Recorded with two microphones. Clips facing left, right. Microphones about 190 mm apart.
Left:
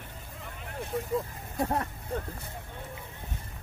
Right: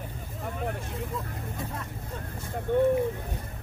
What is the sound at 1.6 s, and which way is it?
Speech, 70° left (ahead or behind).